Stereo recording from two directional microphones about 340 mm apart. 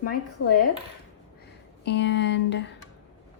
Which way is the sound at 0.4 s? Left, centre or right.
Left.